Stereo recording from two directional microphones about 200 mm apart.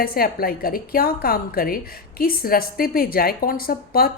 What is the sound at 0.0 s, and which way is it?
A woman's voice, 50° left (ahead or behind).